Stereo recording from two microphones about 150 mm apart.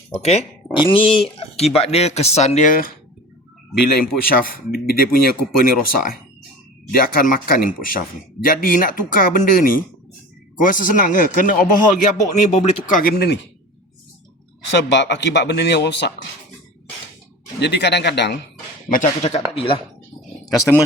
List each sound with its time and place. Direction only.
0.1 s speech: 45° left (ahead or behind); by 2.9 s 65° left (ahead or behind)
3.8 s speech: 85° left; by 12.8 s 50° left (ahead or behind)
12.9 s speech: 75° left (ahead or behind)
15.4 s speech: 90° left
17.6 s speech: 90° left
18.9 s speech: 60° left (ahead or behind)
19.5 s speech: 35° left (ahead or behind)